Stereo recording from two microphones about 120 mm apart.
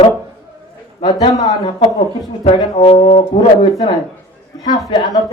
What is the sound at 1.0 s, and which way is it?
Speech, 35° left (ahead or behind).